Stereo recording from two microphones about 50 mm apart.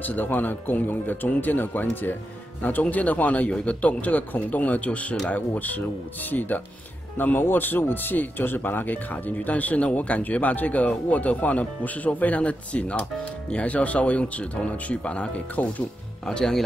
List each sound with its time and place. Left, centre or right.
0.0 s speech: left
16.3 s speech: centre